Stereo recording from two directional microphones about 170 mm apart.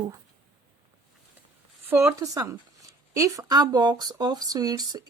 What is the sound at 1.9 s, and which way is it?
Speech, 15° right (ahead or behind).